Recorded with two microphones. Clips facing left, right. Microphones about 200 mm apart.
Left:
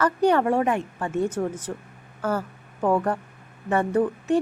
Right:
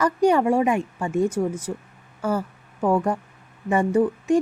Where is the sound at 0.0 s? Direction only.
10° right (ahead or behind).